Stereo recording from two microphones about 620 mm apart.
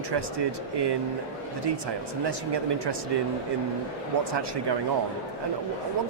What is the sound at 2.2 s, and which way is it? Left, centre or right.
Speech, right.